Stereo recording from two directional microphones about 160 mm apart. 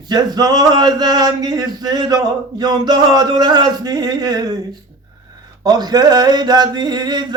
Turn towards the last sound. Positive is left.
turn(degrees=-25)  # may be behind; listen again after turning